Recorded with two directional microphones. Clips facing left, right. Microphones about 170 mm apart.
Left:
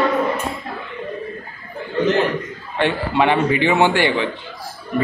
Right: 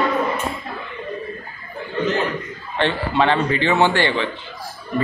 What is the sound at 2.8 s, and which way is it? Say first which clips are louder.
A man's voice: left 1 dB; 15° left (ahead or behind).